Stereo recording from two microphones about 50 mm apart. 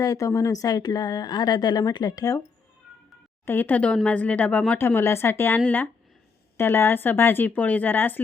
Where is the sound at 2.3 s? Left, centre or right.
Left.